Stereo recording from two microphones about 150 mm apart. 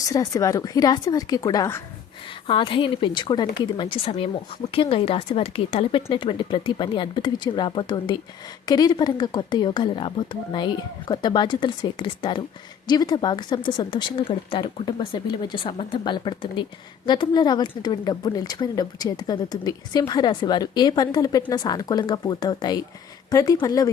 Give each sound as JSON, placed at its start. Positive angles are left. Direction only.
{"t": 0.0, "sound": "a woman's voice", "side_deg": 25}
{"t": 2.5, "sound": "a woman's voice", "side_deg": 35}